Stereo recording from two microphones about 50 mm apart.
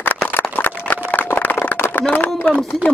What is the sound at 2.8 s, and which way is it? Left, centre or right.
Speech, left.